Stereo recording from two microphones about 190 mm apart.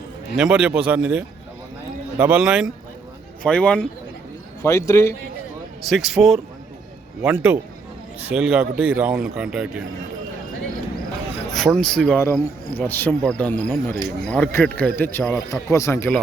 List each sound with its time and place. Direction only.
0.3 s speech: 5° right (ahead or behind); by 5.1 s 15° left (ahead or behind)
5.8 s speech: centre (ahead or behind)
11.5 s speech: centre (ahead or behind)